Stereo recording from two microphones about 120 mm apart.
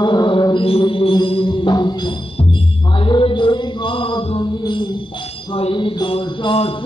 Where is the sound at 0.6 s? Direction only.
50° left (ahead or behind).